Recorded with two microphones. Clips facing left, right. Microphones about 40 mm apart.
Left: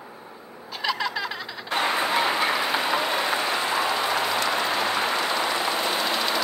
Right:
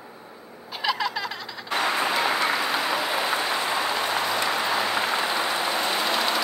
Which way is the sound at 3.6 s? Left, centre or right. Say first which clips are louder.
Left 1 dB; centre.